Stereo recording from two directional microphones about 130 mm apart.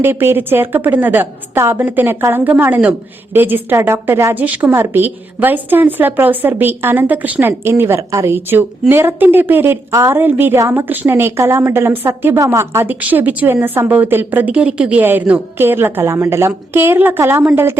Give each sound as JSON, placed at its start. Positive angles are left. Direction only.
{"t": 0.0, "sound": "a woman's voice", "side_deg": -15}